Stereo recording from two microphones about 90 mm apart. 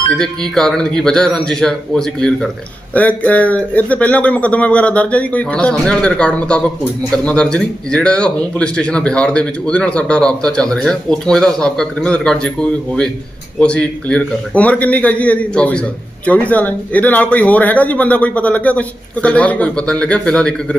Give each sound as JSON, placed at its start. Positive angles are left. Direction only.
{"t": 0.1, "sound": "speech", "side_deg": 5}
{"t": 2.9, "sound": "speech", "side_deg": 15}